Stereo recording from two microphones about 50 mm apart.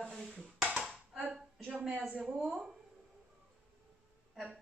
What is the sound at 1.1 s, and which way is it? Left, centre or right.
A man's voice, right.